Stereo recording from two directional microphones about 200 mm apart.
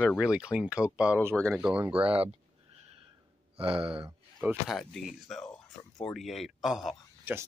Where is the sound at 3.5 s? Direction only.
25° right (ahead or behind).